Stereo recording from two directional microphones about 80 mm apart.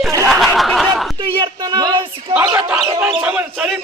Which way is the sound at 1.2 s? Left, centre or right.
Right.